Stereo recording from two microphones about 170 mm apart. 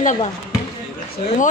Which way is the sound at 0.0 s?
45° left (ahead or behind).